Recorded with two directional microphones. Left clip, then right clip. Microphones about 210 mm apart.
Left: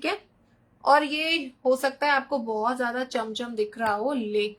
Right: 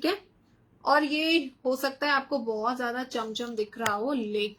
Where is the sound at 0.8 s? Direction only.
20° left (ahead or behind).